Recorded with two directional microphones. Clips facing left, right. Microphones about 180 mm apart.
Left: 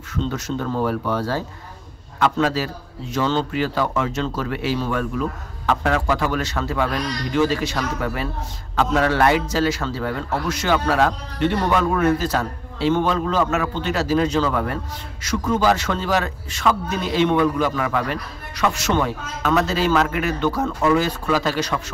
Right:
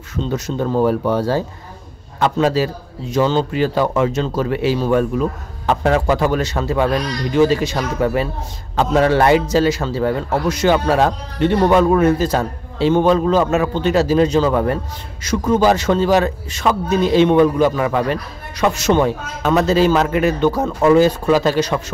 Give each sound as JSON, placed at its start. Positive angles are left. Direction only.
{"t": 0.1, "sound": "speech", "side_deg": -20}
{"t": 2.4, "sound": "a man's voice", "side_deg": -20}